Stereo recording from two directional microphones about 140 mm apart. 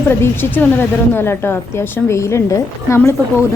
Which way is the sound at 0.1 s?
15° left (ahead or behind).